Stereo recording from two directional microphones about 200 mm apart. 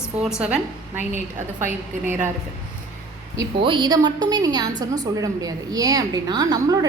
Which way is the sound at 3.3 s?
25° right (ahead or behind).